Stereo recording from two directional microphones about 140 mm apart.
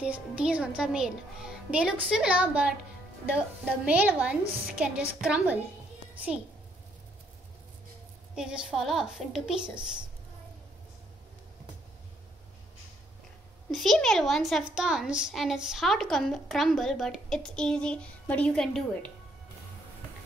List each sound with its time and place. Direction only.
0.0 s a child's voice: 10° right (ahead or behind)
8.4 s a woman's voice: 5° right (ahead or behind)
13.7 s a woman's voice: centre (ahead or behind)